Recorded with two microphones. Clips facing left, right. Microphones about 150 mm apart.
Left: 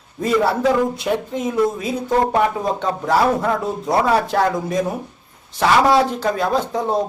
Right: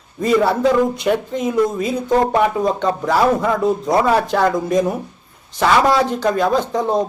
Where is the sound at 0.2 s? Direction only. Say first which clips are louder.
Right 2 dB; centre (ahead or behind).